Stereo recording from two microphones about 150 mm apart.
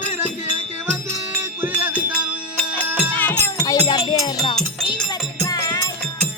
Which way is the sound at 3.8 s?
30° left (ahead or behind).